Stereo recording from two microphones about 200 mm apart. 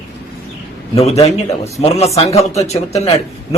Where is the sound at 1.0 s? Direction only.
30° left (ahead or behind).